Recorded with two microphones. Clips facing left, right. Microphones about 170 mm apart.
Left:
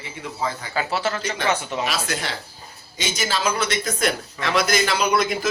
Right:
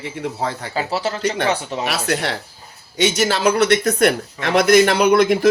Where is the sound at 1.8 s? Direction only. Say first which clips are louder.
Right 5 dB; 65° right (ahead or behind).